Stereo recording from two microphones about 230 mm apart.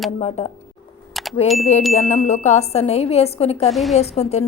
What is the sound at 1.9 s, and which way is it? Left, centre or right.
A woman's voice, left.